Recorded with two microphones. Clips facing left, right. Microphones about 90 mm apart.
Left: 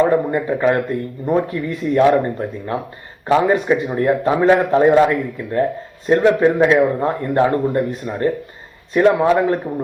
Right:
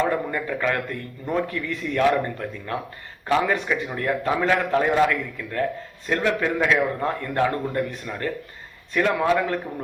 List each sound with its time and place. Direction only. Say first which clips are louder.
0.0 s speech: left 8 dB; 30° left (ahead or behind)